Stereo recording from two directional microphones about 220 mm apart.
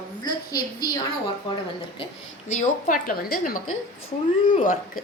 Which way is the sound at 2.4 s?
30° left (ahead or behind).